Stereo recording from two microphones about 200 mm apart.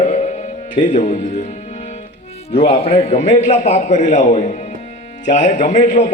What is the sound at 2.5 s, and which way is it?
Speech, 30° left (ahead or behind).